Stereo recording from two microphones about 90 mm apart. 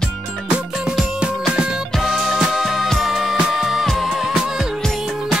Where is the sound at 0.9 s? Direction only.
10° right (ahead or behind).